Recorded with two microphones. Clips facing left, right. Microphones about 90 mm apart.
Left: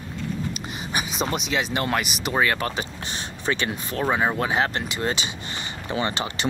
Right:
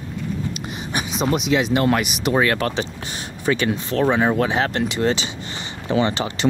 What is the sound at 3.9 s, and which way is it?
Speech, 5° left (ahead or behind).